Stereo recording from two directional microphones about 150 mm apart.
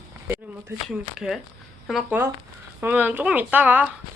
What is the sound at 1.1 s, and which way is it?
Speech, 5° right (ahead or behind).